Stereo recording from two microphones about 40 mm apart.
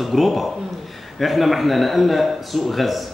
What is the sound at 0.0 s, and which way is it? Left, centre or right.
A man's voice, centre.